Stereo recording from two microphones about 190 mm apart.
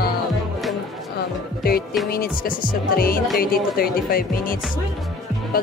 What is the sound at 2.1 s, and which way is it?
Speech, 50° left (ahead or behind).